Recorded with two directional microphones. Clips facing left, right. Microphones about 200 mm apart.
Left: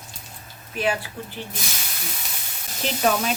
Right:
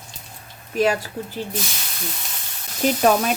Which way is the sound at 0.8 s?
40° right (ahead or behind).